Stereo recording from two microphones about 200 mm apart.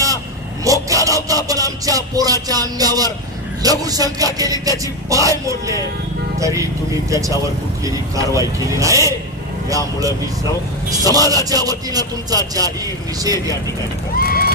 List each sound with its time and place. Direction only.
0.6 s music: 15° right (ahead or behind)
3.6 s speech: 20° right (ahead or behind)
14.2 s vehicle: 50° left (ahead or behind)